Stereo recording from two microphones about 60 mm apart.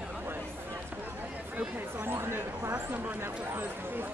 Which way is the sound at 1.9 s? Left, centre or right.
Right.